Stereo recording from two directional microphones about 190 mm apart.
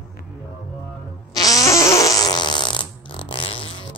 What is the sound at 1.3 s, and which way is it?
Fart, 20° left (ahead or behind).